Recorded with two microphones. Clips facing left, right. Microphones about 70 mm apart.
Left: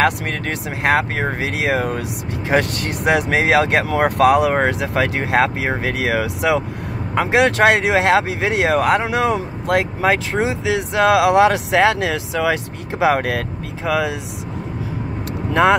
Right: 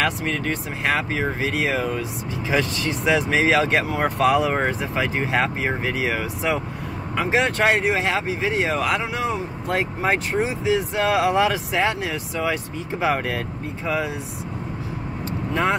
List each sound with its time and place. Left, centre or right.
0.0 s speech: left
7.2 s speech: left
9.0 s speech: left
15.6 s speech: left